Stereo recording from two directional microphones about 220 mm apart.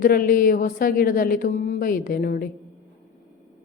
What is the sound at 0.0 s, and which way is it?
Speech, 40° left (ahead or behind).